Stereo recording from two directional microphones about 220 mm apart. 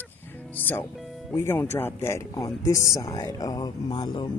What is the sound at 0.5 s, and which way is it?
Speech, 10° left (ahead or behind).